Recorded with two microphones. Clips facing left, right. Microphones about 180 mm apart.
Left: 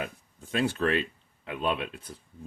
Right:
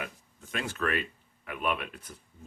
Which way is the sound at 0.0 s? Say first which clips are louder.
Left 4 dB; 30° left (ahead or behind).